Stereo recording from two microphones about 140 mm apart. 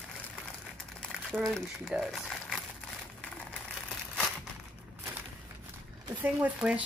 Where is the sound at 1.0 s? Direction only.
Centre (ahead or behind).